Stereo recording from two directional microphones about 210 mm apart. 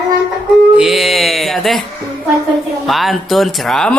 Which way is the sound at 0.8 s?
Centre (ahead or behind).